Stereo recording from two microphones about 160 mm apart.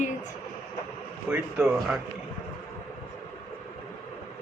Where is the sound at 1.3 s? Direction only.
5° right (ahead or behind).